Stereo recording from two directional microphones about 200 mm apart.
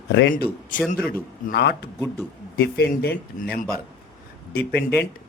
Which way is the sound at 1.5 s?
55° left (ahead or behind).